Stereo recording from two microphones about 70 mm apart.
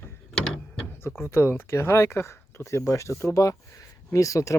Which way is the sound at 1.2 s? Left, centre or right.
Left.